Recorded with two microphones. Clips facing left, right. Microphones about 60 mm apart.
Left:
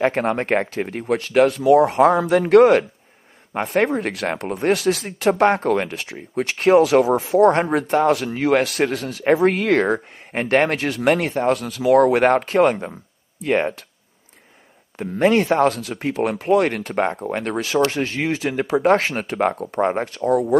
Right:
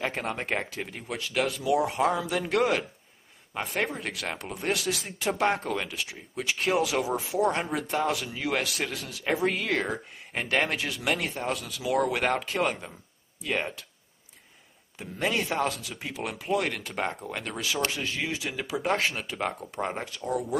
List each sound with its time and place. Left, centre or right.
0.0 s speech: left
15.0 s speech: left